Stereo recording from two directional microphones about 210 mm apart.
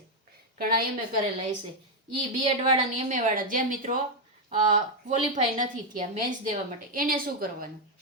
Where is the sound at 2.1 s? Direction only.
20° right (ahead or behind).